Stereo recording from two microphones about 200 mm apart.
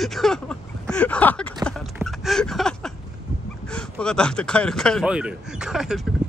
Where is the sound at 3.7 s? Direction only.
5° left (ahead or behind).